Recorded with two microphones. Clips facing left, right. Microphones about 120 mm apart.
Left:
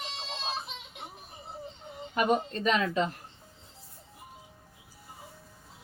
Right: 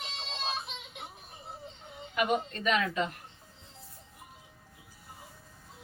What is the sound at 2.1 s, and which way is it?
Speech, 40° left (ahead or behind).